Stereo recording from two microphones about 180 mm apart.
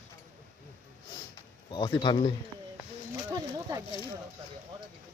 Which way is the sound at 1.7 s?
25° left (ahead or behind).